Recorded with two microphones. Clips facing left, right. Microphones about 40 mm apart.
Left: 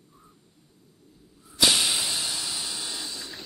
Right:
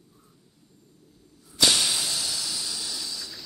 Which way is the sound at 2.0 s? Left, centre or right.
Left.